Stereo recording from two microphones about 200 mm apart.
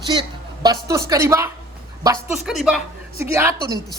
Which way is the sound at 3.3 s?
15° right (ahead or behind).